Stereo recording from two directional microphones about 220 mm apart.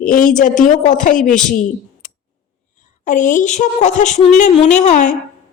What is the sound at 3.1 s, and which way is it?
A woman's voice, 35° left (ahead or behind).